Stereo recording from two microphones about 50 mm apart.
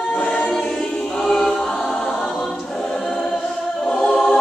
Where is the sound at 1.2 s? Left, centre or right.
Centre.